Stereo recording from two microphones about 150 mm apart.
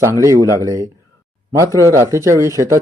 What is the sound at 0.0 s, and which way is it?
Speech, 20° right (ahead or behind).